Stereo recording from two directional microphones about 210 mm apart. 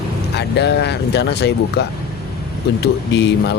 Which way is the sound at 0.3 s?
55° left (ahead or behind).